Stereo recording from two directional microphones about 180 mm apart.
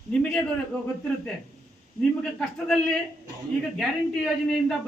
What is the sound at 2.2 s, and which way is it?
A man's voice, 5° left (ahead or behind).